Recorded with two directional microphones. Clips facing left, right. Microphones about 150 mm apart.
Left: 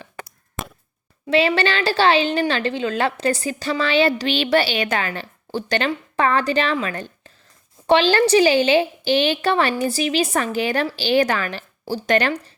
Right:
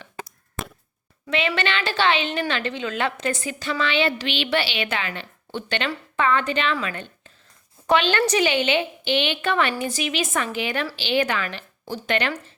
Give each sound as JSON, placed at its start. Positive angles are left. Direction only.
{"t": 1.3, "sound": "a woman's voice", "side_deg": 35}
{"t": 6.8, "sound": "a sound", "side_deg": 40}
{"t": 7.9, "sound": "a woman's voice", "side_deg": 30}